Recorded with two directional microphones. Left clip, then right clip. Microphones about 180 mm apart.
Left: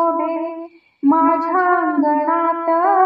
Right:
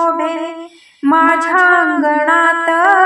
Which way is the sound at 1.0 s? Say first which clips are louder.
Right 4 dB; 35° right (ahead or behind).